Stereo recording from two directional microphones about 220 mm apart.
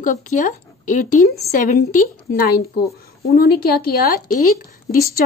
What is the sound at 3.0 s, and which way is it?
A woman's voice, 45° left (ahead or behind).